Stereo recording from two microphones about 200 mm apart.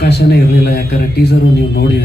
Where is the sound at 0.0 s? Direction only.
55° left (ahead or behind).